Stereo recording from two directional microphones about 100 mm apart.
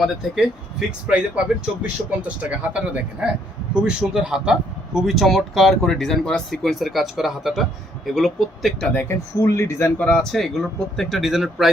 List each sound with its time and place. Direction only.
0.0 s speech: centre (ahead or behind)
8.9 s a man's voice: 20° left (ahead or behind)
10.0 s speech: 5° left (ahead or behind)